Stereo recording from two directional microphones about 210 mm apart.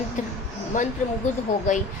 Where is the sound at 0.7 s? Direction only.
35° left (ahead or behind).